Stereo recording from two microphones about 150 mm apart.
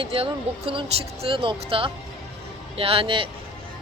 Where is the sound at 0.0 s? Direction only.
40° right (ahead or behind).